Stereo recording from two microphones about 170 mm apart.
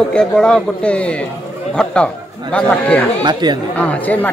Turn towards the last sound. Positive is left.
turn(degrees=10)  # may be behind; listen again after turning